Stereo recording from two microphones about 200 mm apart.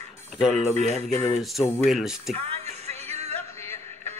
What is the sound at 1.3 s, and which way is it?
Speech, centre (ahead or behind).